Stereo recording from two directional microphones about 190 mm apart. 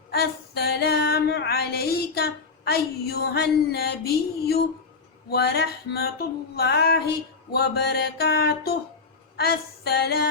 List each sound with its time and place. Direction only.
0.1 s female singing: 55° left (ahead or behind)
5.3 s music: 55° left (ahead or behind)